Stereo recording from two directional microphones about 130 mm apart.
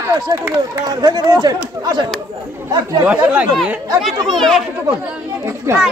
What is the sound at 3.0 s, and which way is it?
Speech, 10° right (ahead or behind).